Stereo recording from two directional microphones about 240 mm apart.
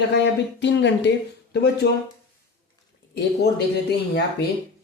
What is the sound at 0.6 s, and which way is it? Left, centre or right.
Speech, left.